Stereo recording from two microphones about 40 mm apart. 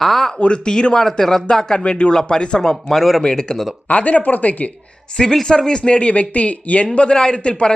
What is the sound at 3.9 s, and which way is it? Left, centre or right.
Speech, left.